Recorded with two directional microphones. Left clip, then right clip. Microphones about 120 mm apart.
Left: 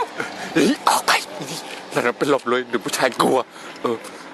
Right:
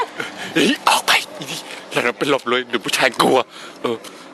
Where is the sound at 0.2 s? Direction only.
Centre (ahead or behind).